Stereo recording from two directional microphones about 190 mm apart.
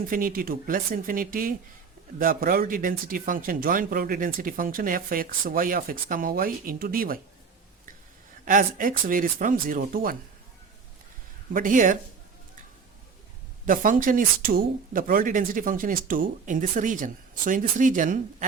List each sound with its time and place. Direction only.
0.0 s speech: 50° right (ahead or behind)
8.4 s speech: 45° right (ahead or behind)
11.5 s speech: 45° right (ahead or behind)
13.7 s speech: 45° right (ahead or behind)